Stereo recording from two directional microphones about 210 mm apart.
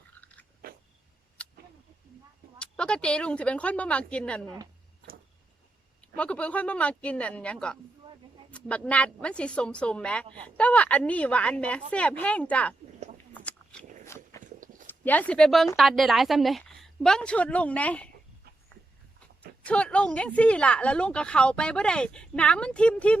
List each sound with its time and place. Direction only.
0.2 s biting: 5° left (ahead or behind)
0.6 s a sound: 45° right (ahead or behind)
2.6 s speech: 5° left (ahead or behind)
6.0 s speech: 5° left (ahead or behind)
13.3 s a sound: 5° left (ahead or behind)
14.1 s walk: 10° left (ahead or behind)
14.4 s a sound: 40° right (ahead or behind)
14.8 s speech: 10° left (ahead or behind)
19.6 s speech: 5° left (ahead or behind)